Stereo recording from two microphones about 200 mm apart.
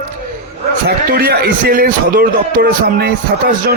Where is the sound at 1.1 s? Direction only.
50° right (ahead or behind).